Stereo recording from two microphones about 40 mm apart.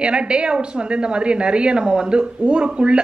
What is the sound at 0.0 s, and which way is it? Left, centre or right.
A woman's voice, right.